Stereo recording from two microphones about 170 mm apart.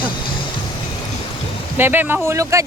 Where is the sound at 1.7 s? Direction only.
10° right (ahead or behind).